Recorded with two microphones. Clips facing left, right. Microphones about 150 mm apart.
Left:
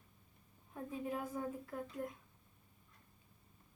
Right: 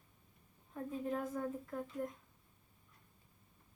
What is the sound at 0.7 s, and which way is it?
Speech, 10° left (ahead or behind).